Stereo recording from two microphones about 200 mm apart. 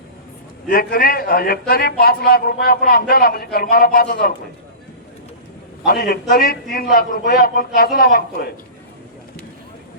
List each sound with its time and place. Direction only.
0.7 s a man's voice: 45° left (ahead or behind)
5.8 s a man's voice: 50° left (ahead or behind)